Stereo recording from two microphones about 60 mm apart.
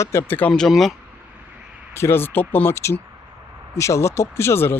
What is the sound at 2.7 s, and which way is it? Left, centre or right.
Speech, left.